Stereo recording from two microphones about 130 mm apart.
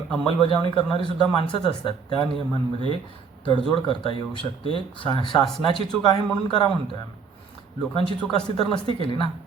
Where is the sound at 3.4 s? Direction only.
40° left (ahead or behind).